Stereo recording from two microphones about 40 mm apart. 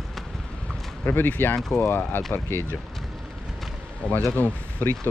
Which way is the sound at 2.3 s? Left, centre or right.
Left.